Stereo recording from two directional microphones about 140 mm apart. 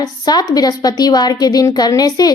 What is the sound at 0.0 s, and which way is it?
A woman's voice, 30° left (ahead or behind).